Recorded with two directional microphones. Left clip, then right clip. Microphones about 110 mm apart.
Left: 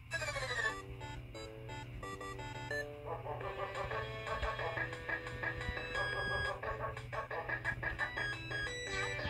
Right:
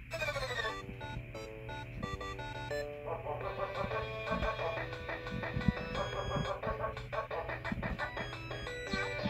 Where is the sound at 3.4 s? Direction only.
25° left (ahead or behind).